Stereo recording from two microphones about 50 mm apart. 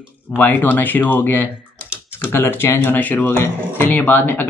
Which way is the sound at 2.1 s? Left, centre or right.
Left.